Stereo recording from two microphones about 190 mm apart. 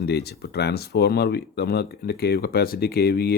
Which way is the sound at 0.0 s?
60° left (ahead or behind).